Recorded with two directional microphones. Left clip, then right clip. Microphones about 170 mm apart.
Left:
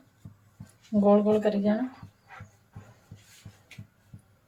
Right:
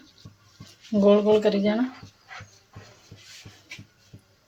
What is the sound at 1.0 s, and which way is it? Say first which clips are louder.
Speech: right 4 dB; 25° right (ahead or behind).